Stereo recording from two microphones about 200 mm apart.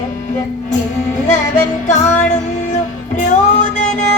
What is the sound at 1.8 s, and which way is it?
Music, 35° left (ahead or behind).